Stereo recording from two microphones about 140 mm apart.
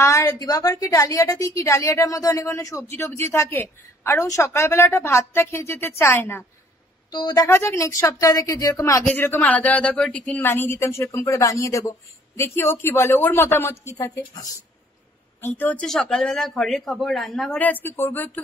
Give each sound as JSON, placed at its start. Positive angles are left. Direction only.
{"t": 0.0, "sound": "a woman's voice", "side_deg": 25}
{"t": 7.1, "sound": "a woman's voice", "side_deg": 30}
{"t": 15.8, "sound": "speech", "side_deg": 5}
{"t": 17.6, "sound": "a woman's voice", "side_deg": 10}